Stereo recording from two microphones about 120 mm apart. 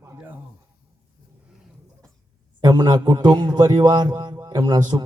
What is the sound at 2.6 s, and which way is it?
A man's voice, 35° right (ahead or behind).